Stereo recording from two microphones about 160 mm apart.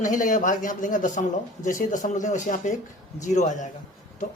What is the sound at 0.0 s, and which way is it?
Speech, 55° left (ahead or behind).